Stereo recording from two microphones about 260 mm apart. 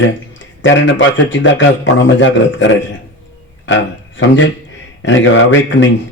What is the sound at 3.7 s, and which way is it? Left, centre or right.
A man's voice, left.